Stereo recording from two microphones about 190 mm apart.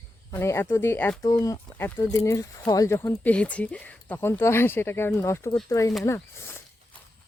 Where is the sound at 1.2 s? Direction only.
20° left (ahead or behind).